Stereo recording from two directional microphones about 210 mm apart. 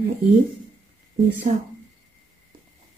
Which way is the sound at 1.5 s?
35° right (ahead or behind).